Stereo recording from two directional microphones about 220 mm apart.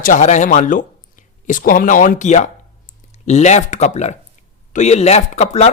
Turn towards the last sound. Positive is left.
turn(degrees=30)  # may be behind; listen again after turning